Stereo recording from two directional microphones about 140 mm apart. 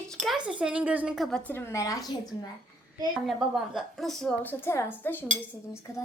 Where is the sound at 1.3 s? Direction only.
5° left (ahead or behind).